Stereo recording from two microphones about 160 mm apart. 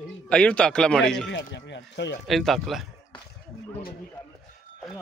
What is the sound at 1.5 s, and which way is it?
Speech, 90° left.